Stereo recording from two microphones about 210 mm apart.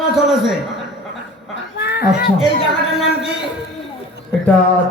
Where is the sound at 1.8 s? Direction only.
50° left (ahead or behind).